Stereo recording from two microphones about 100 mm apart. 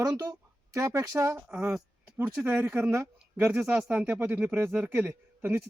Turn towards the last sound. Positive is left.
turn(degrees=-20)  # may be behind; listen again after turning